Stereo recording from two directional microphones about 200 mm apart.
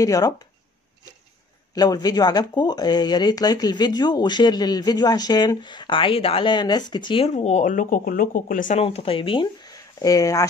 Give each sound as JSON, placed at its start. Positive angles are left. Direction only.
{"t": 0.0, "sound": "speech", "side_deg": 20}
{"t": 1.8, "sound": "speech", "side_deg": 20}
{"t": 8.8, "sound": "speech", "side_deg": 30}